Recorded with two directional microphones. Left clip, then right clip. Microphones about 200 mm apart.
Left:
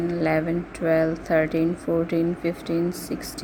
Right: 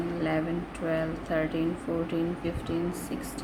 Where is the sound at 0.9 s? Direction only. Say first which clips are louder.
Left 9 dB; 35° left (ahead or behind).